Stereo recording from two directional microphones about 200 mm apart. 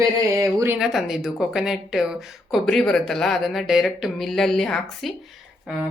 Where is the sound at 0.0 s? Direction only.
15° right (ahead or behind).